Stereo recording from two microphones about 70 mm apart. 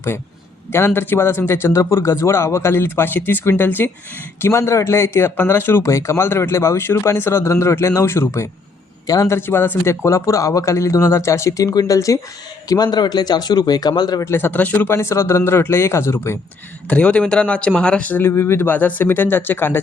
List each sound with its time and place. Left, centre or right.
0.7 s speech: left
11.7 s speech: left
11.9 s speech: left
12.6 s speech: left
14.2 s speech: left
14.6 s speech: left
14.8 s speech: left
16.9 s speech: centre
18.2 s speech: left